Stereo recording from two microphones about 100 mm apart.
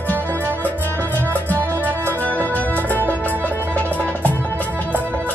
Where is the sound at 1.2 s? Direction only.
20° right (ahead or behind).